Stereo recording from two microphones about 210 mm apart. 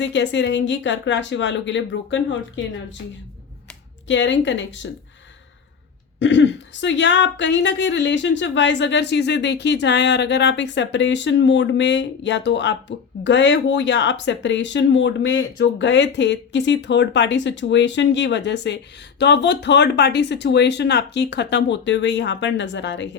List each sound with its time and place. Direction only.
0.0 s speech: 55° left (ahead or behind)
4.1 s speech: 60° left (ahead or behind)
6.1 s speech: 60° left (ahead or behind)